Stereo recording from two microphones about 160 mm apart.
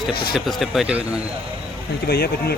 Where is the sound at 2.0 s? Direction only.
75° left (ahead or behind).